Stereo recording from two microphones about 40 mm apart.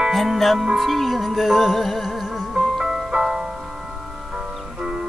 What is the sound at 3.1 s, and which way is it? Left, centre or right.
Music, centre.